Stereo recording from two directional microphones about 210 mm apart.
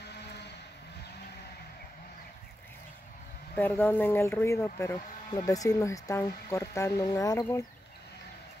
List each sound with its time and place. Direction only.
0.1 s vehicle: 55° left (ahead or behind)
3.5 s speech: 10° left (ahead or behind)